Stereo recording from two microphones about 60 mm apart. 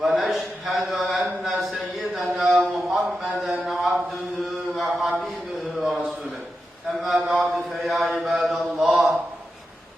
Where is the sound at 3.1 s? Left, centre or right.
Centre.